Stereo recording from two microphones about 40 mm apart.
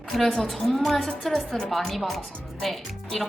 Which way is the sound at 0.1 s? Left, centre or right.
Centre.